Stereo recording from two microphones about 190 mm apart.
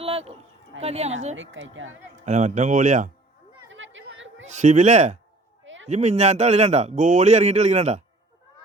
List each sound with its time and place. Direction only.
0.0 s a sound: 30° right (ahead or behind)
0.8 s a man's voice: 35° right (ahead or behind)
1.4 s speech: 80° right
2.2 s a man's voice: 40° right (ahead or behind)
3.7 s chatter: 85° right
4.4 s a man's voice: 40° right (ahead or behind)
5.6 s a sound: 85° right
5.9 s a man's voice: 35° right (ahead or behind)